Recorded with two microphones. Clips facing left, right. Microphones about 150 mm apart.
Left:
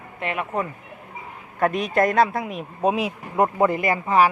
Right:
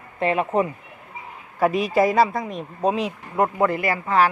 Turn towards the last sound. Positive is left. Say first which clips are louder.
# left 1 dB
turn(degrees=15)  # may be behind; listen again after turning